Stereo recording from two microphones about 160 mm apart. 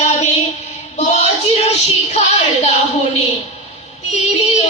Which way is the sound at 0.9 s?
45° left (ahead or behind).